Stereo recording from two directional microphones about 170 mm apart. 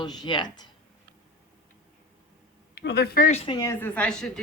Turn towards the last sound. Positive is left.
turn(degrees=5)  # may be behind; listen again after turning